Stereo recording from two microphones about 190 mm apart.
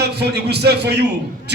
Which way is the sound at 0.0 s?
60° right (ahead or behind).